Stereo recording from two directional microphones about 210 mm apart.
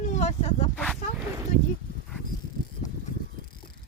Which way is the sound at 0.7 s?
5° left (ahead or behind).